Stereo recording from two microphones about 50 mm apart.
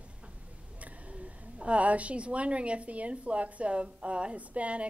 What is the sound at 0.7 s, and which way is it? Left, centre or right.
A woman's voice, right.